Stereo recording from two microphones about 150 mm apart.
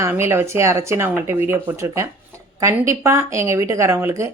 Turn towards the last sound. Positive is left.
turn(degrees=-20)  # may be behind; listen again after turning